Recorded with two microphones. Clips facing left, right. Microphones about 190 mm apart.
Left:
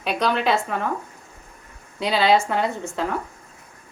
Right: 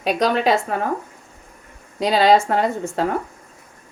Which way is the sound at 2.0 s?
45° right (ahead or behind).